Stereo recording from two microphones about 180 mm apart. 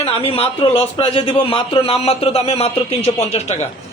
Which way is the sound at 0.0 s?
35° left (ahead or behind).